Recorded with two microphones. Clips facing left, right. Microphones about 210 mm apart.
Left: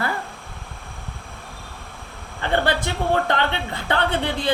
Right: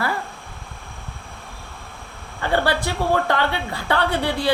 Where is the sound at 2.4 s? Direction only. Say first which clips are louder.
Right 1 dB; 20° left (ahead or behind).